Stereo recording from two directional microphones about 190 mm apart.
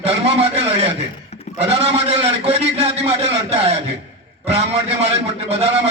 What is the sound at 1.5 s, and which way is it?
A man's voice, 35° right (ahead or behind).